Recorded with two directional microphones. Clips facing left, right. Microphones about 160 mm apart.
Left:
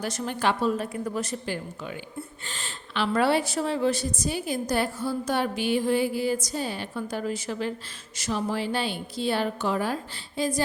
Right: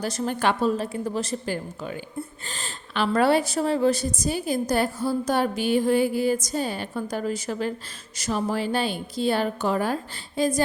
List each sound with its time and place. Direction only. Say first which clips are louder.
0.0 s a woman's voice: right 4 dB; 35° right (ahead or behind)
0.3 s a woman's voice: right 1 dB; 55° right (ahead or behind)
0.8 s a woman's voice: right 2 dB; 30° right (ahead or behind)
4.7 s a sound: right 2 dB; 40° right (ahead or behind)